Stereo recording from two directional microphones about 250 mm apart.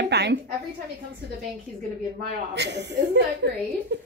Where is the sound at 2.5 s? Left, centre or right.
Right.